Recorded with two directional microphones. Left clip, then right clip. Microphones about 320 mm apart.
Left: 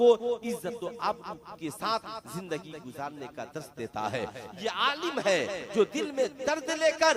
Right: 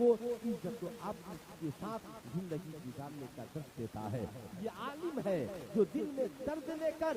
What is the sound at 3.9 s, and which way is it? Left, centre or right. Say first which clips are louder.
A man's voice: left 12 dB; centre.